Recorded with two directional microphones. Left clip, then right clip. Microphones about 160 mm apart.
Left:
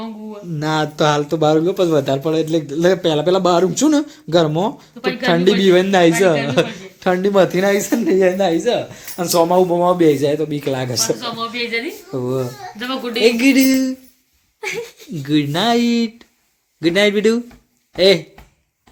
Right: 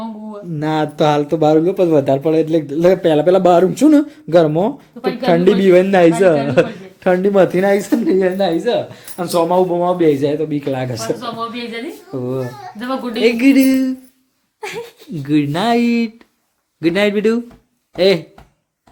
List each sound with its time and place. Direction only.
0.0 s a sound: 15° right (ahead or behind)
0.6 s speech: centre (ahead or behind)
7.8 s speech: 20° left (ahead or behind)
11.2 s a woman's voice: 25° right (ahead or behind)
12.1 s speech: 20° left (ahead or behind)
13.2 s speech: 5° left (ahead or behind)
14.6 s speech: 40° right (ahead or behind)
15.2 s speech: centre (ahead or behind)